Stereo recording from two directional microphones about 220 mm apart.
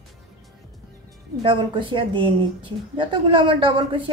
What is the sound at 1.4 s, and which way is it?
A woman's voice, 20° right (ahead or behind).